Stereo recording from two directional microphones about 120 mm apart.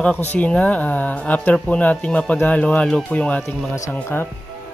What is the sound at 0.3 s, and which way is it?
Speech, 10° left (ahead or behind).